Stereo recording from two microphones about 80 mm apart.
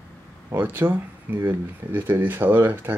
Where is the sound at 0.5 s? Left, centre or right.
Right.